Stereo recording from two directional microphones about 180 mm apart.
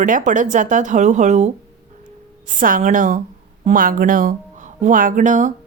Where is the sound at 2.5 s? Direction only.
45° right (ahead or behind).